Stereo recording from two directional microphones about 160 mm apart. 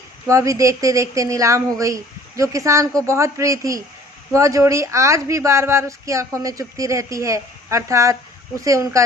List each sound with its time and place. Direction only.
0.3 s speech: 20° right (ahead or behind)